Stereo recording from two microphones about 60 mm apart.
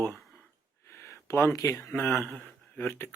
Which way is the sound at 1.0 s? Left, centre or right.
Left.